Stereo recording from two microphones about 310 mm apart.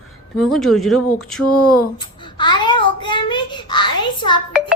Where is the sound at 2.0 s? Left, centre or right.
Centre.